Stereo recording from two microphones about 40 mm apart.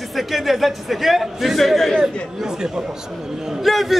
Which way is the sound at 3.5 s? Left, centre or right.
Centre.